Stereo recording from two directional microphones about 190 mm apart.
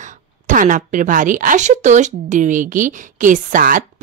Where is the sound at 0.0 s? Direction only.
45° right (ahead or behind).